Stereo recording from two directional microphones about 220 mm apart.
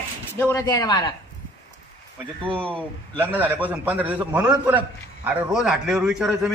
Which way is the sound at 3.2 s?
10° right (ahead or behind).